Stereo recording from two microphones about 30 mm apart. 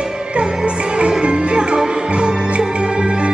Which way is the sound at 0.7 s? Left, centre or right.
Right.